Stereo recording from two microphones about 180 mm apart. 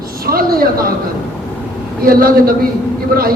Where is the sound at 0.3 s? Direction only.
55° right (ahead or behind).